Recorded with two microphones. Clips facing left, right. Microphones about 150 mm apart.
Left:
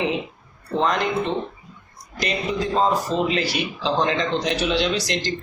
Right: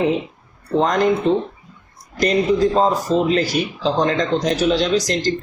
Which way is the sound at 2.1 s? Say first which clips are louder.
Right 8 dB; 40° right (ahead or behind).